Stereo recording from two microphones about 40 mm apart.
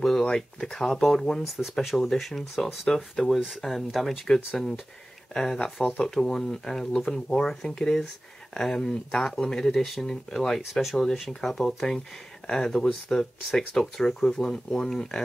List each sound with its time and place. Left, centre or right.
0.0 s a sound: centre
0.6 s speech: centre
1.6 s speech: centre
5.3 s speech: centre
10.7 s speech: centre